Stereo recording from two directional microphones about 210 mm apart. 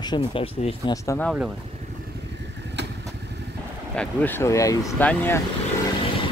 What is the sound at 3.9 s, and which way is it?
Speech, 5° left (ahead or behind).